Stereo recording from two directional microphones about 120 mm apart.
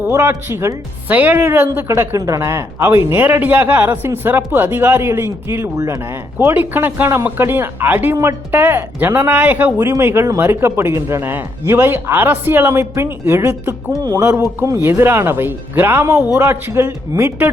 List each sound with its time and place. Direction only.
0.1 s speech: 20° right (ahead or behind)